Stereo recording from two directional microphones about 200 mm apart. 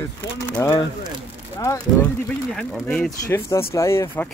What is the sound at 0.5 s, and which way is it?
Speech, 10° left (ahead or behind).